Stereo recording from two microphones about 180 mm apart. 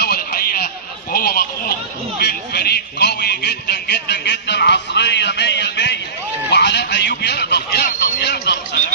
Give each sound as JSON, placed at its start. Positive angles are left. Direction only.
{"t": 0.0, "sound": "a sound", "side_deg": 60}
{"t": 1.1, "sound": "bleat", "side_deg": 55}
{"t": 2.1, "sound": "a man's voice", "side_deg": 60}